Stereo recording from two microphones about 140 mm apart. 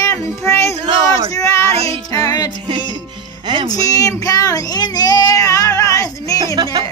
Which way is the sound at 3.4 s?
35° right (ahead or behind).